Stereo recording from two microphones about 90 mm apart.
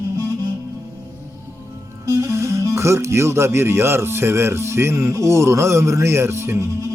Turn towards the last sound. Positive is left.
turn(degrees=-30)  # may be behind; listen again after turning